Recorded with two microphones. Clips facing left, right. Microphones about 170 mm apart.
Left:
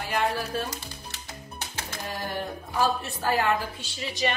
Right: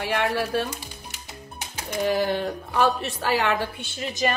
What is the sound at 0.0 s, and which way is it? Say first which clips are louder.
Speech: right 3 dB; 70° right (ahead or behind).